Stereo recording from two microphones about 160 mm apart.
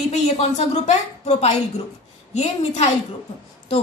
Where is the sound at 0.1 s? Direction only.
45° left (ahead or behind).